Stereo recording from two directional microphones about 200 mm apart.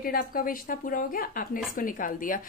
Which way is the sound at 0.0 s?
45° left (ahead or behind).